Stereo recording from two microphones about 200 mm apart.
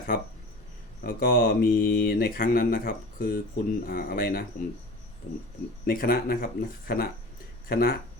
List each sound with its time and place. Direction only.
1.0 s speech: 45° left (ahead or behind)
5.8 s speech: 45° left (ahead or behind)